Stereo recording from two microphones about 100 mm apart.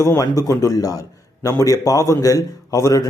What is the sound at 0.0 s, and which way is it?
A man's voice, 30° left (ahead or behind).